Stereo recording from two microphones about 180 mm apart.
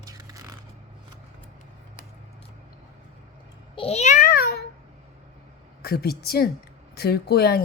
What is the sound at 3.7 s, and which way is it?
Babbling, 35° left (ahead or behind).